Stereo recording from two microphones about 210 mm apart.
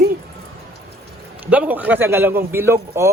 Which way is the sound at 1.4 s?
5° right (ahead or behind).